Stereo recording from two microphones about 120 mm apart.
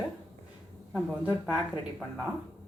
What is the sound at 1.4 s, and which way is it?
Speech, 10° right (ahead or behind).